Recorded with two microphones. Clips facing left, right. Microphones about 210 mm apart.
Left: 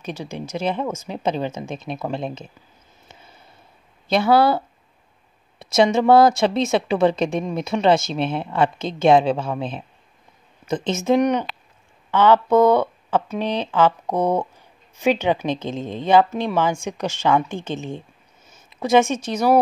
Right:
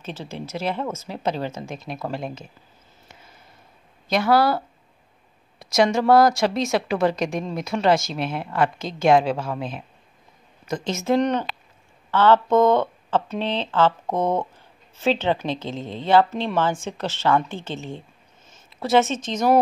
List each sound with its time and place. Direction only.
0.0 s a woman's voice: 15° left (ahead or behind)
4.1 s a woman's voice: 25° left (ahead or behind)
5.6 s a woman's voice: 25° left (ahead or behind)
10.9 s speech: 15° left (ahead or behind)